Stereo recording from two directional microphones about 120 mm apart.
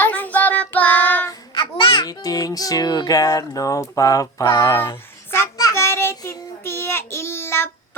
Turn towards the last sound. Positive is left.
turn(degrees=20)  # may be behind; listen again after turning